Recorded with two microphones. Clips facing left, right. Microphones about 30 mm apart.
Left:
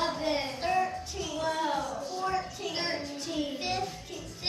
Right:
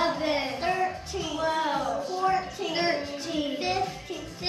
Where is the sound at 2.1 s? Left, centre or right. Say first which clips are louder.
Right 5 dB; centre.